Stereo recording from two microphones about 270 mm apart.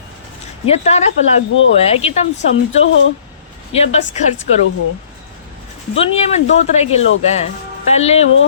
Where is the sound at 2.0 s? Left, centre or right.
Left.